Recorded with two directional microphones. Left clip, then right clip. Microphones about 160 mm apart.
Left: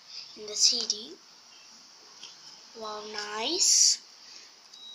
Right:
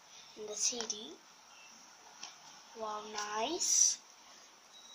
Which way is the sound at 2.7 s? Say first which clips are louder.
Left 3 dB; 5° right (ahead or behind).